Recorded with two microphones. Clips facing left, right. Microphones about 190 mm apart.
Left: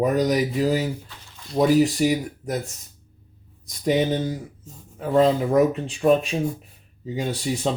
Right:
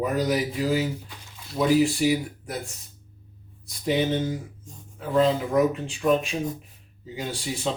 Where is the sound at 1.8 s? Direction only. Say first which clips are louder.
Left 2 dB; 40° left (ahead or behind).